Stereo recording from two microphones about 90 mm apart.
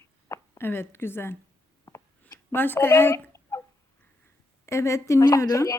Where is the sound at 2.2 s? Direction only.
25° left (ahead or behind).